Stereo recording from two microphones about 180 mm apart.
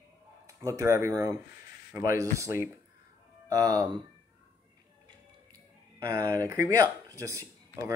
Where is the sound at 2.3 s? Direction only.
15° right (ahead or behind).